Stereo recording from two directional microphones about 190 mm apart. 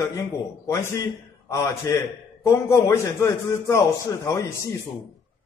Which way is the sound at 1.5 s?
15° left (ahead or behind).